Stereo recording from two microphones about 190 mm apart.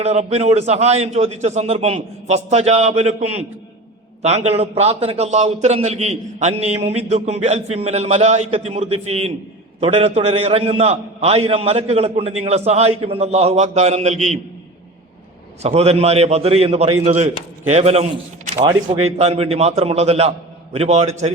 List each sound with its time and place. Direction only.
0.0 s a man's voice: 35° right (ahead or behind)
15.6 s a man's voice: 35° right (ahead or behind)
18.5 s a man's voice: 20° right (ahead or behind)
18.9 s a man's voice: 35° right (ahead or behind)